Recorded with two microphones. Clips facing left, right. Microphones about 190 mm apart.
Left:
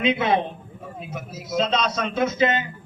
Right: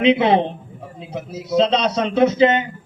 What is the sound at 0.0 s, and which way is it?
A man's voice, 30° right (ahead or behind).